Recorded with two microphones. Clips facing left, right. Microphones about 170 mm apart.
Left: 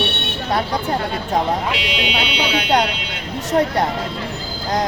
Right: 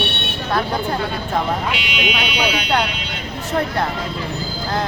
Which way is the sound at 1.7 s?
35° left (ahead or behind).